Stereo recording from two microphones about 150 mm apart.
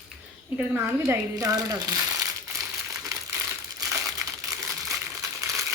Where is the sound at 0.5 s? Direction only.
10° right (ahead or behind).